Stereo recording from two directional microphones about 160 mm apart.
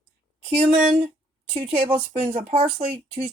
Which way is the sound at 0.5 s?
40° right (ahead or behind).